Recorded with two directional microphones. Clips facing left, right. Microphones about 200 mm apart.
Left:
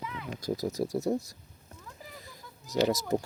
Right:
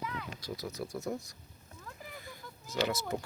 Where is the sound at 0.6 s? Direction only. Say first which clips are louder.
Left 8 dB; 40° left (ahead or behind).